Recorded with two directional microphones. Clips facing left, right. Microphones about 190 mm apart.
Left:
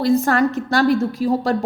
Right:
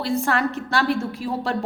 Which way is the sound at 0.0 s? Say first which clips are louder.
Left 6 dB; 40° left (ahead or behind).